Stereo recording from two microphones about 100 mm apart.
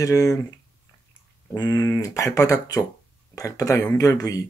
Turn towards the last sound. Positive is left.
turn(degrees=35)  # may be behind; listen again after turning